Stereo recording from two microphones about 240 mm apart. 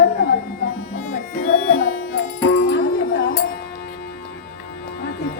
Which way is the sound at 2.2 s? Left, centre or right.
Left.